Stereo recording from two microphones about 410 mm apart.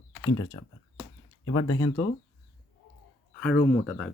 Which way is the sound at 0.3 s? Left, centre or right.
Centre.